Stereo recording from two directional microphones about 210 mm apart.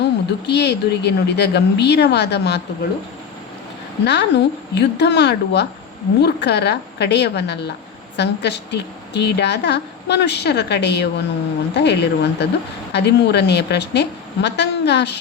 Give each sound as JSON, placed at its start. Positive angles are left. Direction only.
{"t": 0.0, "sound": "speech", "side_deg": 55}
{"t": 4.0, "sound": "a woman's voice", "side_deg": 55}